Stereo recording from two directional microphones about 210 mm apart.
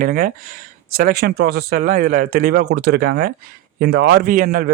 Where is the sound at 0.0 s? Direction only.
45° right (ahead or behind).